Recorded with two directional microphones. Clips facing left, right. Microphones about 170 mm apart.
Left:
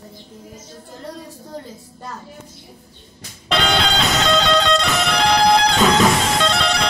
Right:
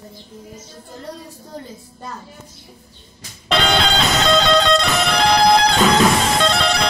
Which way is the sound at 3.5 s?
30° right (ahead or behind).